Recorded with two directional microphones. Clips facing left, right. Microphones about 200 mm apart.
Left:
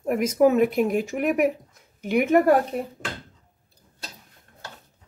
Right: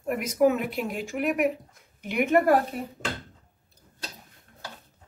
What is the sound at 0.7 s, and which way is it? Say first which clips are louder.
Speech: left 8 dB; 45° left (ahead or behind).